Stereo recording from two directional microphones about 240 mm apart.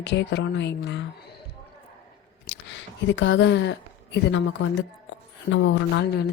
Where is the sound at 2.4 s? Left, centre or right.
Left.